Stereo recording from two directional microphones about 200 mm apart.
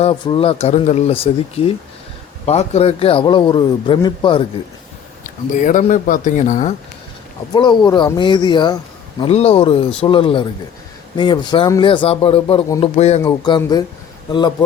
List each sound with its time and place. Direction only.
0.0 s speech: 25° left (ahead or behind)
5.2 s speech: 40° left (ahead or behind)
7.5 s speech: 20° left (ahead or behind)